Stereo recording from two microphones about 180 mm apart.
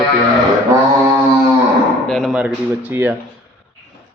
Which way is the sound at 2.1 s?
Centre (ahead or behind).